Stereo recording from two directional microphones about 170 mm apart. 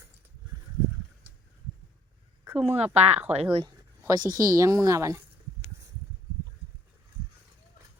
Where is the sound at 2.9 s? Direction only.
40° right (ahead or behind).